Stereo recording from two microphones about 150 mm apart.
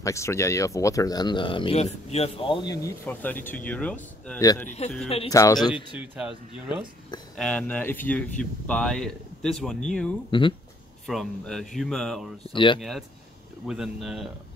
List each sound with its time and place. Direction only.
0.0 s speech: 20° left (ahead or behind); by 2.7 s 35° left (ahead or behind)
3.1 s speech: 10° left (ahead or behind)
4.4 s speech: 20° left (ahead or behind)
4.6 s speech: 45° left (ahead or behind)
5.3 s speech: 20° left (ahead or behind)
5.9 s speech: 5° right (ahead or behind)
7.3 s speech: 10° left (ahead or behind)
12.5 s speech: 35° left (ahead or behind)
13.7 s speech: 5° right (ahead or behind)